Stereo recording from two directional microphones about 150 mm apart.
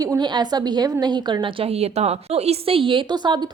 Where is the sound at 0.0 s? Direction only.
25° right (ahead or behind).